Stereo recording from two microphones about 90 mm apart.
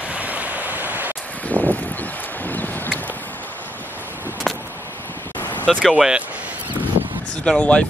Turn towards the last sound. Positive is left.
turn(degrees=10)  # may be behind; listen again after turning